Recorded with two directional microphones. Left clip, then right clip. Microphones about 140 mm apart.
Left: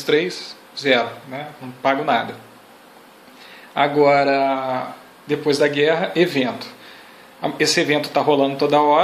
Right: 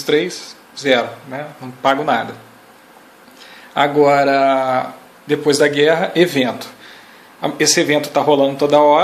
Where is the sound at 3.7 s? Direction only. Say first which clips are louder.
Right 3 dB; 15° right (ahead or behind).